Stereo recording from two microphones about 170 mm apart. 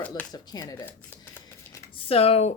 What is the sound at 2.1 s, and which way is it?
Speech, 35° left (ahead or behind).